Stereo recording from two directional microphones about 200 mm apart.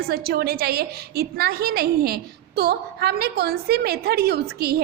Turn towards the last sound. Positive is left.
turn(degrees=-50)  # may be behind; listen again after turning